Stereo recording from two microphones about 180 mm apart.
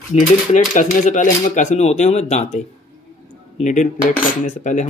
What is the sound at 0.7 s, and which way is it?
A man's voice, 45° left (ahead or behind).